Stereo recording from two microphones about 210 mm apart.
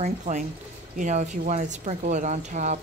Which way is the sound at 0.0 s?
35° right (ahead or behind).